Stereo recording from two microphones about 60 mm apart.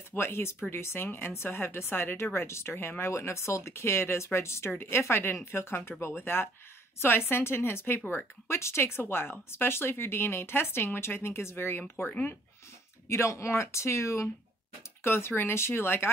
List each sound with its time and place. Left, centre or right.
0.1 s speech: left
3.1 s speech: left
8.5 s speech: left
13.1 s speech: left
15.0 s speech: left